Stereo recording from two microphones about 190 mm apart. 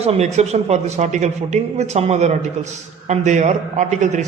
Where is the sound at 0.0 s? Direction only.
35° right (ahead or behind).